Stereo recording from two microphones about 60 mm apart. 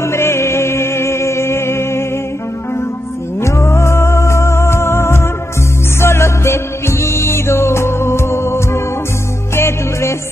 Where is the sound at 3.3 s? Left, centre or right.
Left.